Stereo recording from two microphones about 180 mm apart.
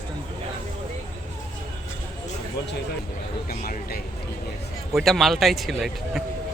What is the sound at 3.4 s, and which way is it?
Speech, 55° left (ahead or behind).